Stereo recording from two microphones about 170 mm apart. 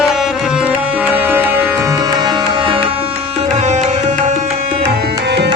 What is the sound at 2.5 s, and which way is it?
Music, 30° right (ahead or behind).